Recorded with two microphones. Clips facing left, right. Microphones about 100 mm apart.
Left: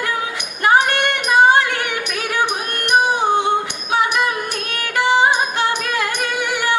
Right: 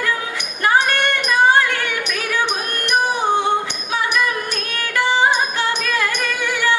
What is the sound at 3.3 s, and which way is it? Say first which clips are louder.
Music: left 1 dB; 20° left (ahead or behind).